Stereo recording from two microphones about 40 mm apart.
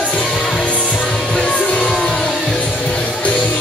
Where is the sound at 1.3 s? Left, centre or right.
Centre.